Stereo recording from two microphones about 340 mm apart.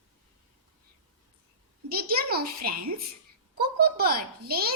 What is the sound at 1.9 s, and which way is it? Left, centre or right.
Speech, right.